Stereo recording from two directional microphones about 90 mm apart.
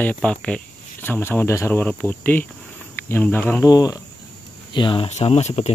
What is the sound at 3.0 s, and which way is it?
Cricket, 25° left (ahead or behind).